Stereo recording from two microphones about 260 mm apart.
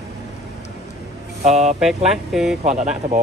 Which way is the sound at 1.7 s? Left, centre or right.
Centre.